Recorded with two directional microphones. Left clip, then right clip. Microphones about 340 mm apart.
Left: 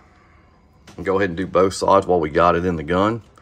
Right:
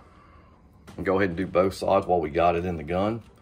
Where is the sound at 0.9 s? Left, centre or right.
Centre.